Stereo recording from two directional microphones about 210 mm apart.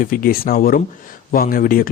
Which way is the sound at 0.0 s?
45° left (ahead or behind).